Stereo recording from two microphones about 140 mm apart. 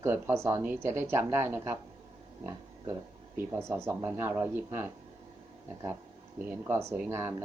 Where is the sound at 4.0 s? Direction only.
15° right (ahead or behind).